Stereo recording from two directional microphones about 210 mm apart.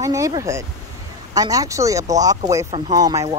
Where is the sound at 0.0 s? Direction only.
15° right (ahead or behind).